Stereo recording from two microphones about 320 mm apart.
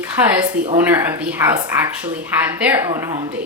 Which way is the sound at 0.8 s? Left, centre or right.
Centre.